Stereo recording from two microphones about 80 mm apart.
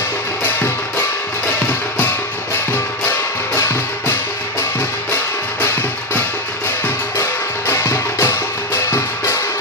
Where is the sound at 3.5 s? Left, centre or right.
Left.